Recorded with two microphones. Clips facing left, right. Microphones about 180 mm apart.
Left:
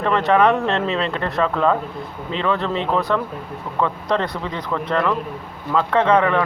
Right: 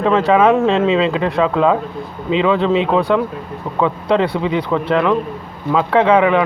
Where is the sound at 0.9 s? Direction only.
90° right.